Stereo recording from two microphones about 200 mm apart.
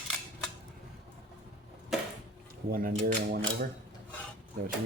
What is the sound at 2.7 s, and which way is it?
Speech, 45° right (ahead or behind).